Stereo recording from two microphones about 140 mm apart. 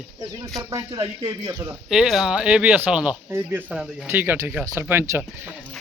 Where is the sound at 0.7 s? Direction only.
25° right (ahead or behind).